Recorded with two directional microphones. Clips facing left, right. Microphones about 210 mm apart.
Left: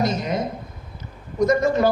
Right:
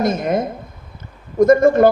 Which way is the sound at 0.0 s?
50° right (ahead or behind).